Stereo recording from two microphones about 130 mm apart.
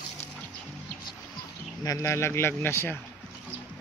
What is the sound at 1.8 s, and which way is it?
Speech, 25° left (ahead or behind).